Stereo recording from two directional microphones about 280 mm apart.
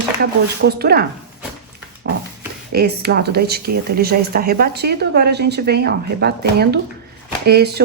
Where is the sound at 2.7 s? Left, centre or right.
Right.